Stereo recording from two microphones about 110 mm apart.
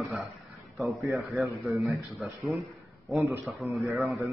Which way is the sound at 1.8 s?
30° right (ahead or behind).